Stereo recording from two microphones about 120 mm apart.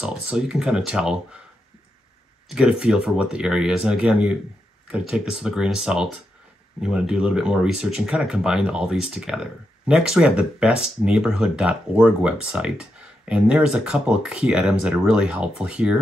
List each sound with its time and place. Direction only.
0.3 s speech: 5° right (ahead or behind)
2.5 s speech: 5° right (ahead or behind)